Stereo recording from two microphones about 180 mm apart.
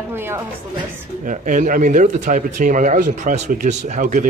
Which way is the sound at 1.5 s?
45° right (ahead or behind).